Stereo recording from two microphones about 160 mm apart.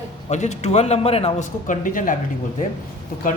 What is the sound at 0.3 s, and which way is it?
Speech, 45° left (ahead or behind).